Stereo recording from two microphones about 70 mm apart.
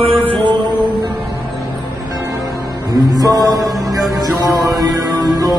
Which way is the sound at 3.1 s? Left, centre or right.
Right.